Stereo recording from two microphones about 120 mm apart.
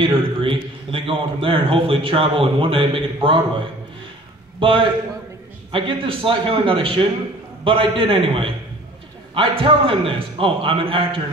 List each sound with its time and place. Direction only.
0.0 s a man's voice: 45° right (ahead or behind)
4.6 s a man's voice: 45° right (ahead or behind)